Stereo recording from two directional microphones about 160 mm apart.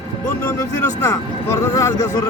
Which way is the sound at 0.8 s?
15° left (ahead or behind).